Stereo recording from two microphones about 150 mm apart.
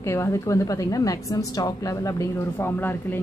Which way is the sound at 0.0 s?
20° left (ahead or behind).